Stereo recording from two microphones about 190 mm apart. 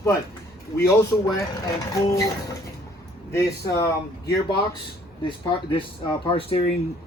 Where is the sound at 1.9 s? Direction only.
15° left (ahead or behind).